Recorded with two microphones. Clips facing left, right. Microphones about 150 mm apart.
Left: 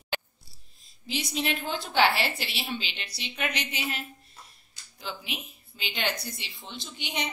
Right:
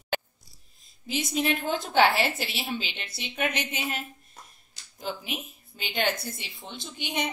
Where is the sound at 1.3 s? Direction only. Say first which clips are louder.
Right 4 dB; 50° right (ahead or behind).